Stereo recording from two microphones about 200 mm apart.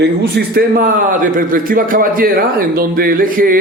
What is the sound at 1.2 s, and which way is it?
Speech, 45° right (ahead or behind).